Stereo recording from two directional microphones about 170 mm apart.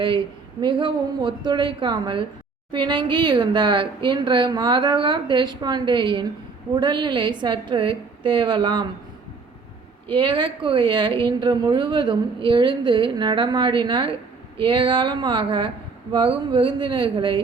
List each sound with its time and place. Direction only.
0.6 s speech: 30° right (ahead or behind)
10.1 s speech: 30° right (ahead or behind)